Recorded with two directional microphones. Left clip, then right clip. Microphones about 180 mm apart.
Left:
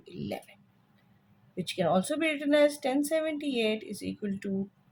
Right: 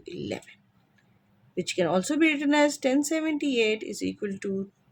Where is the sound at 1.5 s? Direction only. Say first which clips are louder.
Right 2 dB; 45° right (ahead or behind).